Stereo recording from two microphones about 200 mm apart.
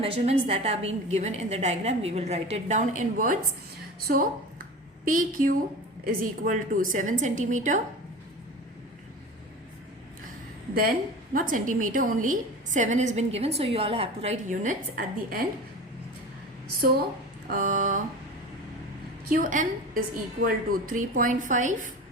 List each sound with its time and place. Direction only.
0.0 s a woman's voice: 30° right (ahead or behind)
11.3 s a woman's voice: 40° right (ahead or behind)
17.5 s a woman's voice: 40° right (ahead or behind)
19.3 s a woman's voice: 40° right (ahead or behind)